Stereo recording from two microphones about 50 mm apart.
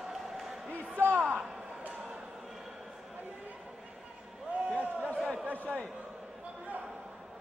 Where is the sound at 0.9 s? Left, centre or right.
Right.